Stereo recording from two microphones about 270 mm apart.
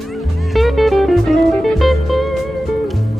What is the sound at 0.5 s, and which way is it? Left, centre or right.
Music, centre.